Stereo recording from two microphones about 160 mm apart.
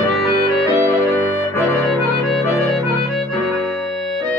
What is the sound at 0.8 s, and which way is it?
Music, 20° right (ahead or behind).